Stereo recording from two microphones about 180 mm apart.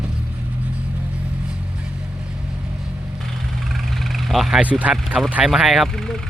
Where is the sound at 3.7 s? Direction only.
Centre (ahead or behind).